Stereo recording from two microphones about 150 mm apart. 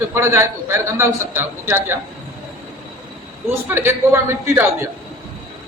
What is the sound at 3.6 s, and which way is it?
A man's voice, 15° right (ahead or behind).